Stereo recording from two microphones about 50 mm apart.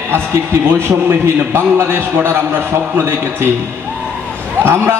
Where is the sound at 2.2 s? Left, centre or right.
Right.